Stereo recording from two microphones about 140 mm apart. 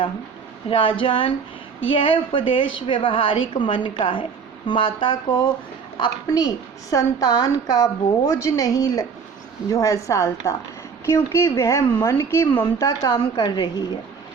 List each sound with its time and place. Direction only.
0.7 s a woman's voice: 40° left (ahead or behind); by 12.6 s 15° left (ahead or behind)
12.8 s a woman's voice: 30° left (ahead or behind)